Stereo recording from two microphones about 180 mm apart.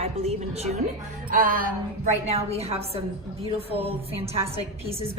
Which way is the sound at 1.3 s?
50° right (ahead or behind).